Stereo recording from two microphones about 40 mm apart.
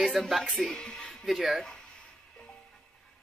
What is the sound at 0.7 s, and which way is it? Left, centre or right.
Speech, centre.